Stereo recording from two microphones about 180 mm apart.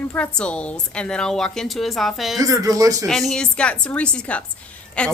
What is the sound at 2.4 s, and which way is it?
Speech, 20° right (ahead or behind).